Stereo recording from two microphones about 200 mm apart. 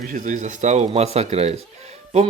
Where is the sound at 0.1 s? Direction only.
40° right (ahead or behind).